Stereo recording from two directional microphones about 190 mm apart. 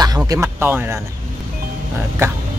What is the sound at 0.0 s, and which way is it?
Speech, 20° right (ahead or behind).